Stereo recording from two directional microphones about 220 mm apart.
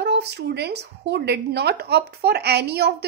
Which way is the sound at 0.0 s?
50° right (ahead or behind).